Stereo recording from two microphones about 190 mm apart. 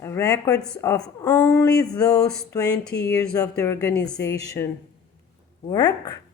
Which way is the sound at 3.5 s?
10° left (ahead or behind).